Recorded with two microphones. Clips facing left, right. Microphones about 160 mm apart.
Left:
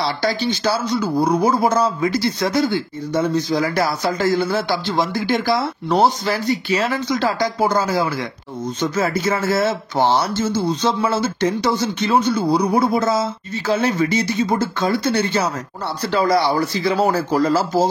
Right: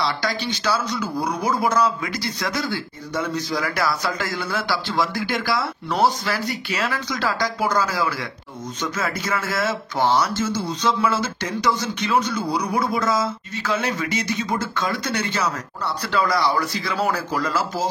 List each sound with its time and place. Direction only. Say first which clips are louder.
0.0 s speech: left 4 dB; 30° left (ahead or behind)